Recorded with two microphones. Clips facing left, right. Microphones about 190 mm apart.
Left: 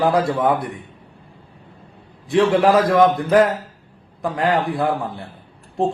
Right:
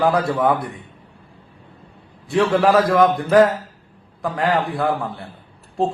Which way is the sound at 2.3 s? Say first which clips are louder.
Left 1 dB; 20° left (ahead or behind).